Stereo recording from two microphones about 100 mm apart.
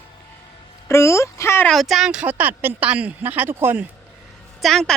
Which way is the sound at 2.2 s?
20° right (ahead or behind).